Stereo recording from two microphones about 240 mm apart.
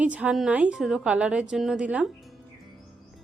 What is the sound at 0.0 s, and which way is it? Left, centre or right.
A woman's voice, centre.